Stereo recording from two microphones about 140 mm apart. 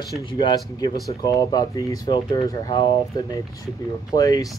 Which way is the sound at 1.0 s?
25° left (ahead or behind).